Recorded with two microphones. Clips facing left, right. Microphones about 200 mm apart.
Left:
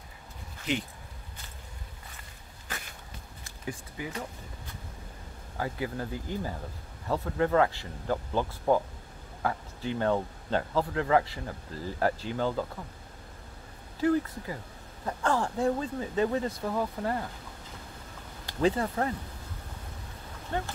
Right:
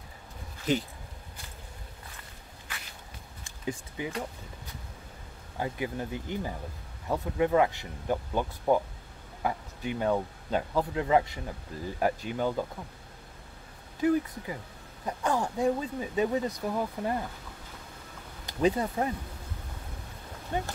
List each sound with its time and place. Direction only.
3.6 s speech: 20° right (ahead or behind)
5.6 s speech: 20° right (ahead or behind)
14.0 s speech: 15° right (ahead or behind)
18.6 s speech: 15° right (ahead or behind)
20.5 s speech: 15° right (ahead or behind)